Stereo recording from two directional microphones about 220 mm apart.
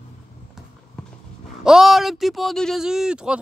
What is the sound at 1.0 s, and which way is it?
Clip-clop, 5° left (ahead or behind).